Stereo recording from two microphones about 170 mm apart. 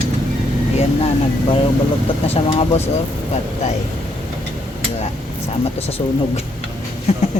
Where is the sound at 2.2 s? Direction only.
35° left (ahead or behind).